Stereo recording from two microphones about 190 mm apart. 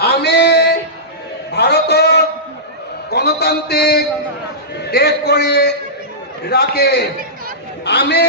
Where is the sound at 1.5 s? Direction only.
60° left (ahead or behind).